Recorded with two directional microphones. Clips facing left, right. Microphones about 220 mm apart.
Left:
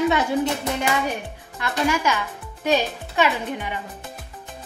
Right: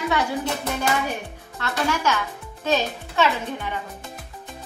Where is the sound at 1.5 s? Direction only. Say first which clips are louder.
Left 2 dB; 15° left (ahead or behind).